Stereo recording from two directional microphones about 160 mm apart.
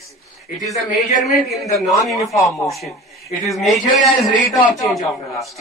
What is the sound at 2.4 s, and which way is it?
Speech, 20° left (ahead or behind).